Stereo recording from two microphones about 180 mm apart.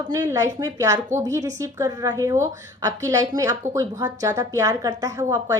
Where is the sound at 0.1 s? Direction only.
20° right (ahead or behind).